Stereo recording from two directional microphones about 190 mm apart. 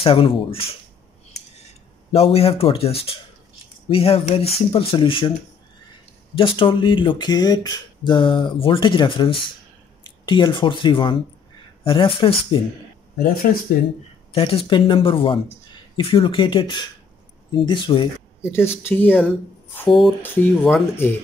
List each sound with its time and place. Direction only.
0.0 s speech: 30° left (ahead or behind)
2.1 s speech: 30° left (ahead or behind)
6.3 s speech: 25° left (ahead or behind)
14.3 s speech: 30° left (ahead or behind)
18.4 s a woman's voice: 10° left (ahead or behind)